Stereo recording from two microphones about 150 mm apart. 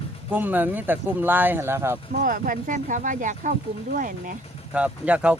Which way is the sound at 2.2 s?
65° right (ahead or behind).